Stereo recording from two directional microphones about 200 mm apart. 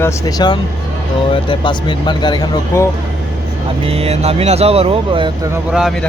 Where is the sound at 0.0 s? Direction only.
20° left (ahead or behind).